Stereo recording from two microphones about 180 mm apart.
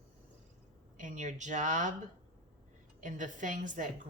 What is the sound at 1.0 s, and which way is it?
Speech, 45° right (ahead or behind).